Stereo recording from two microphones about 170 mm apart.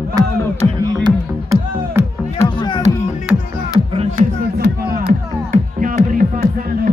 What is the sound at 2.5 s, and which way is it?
Music, 25° left (ahead or behind).